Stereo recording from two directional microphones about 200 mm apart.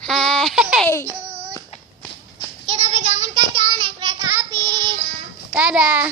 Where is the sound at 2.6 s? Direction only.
30° right (ahead or behind).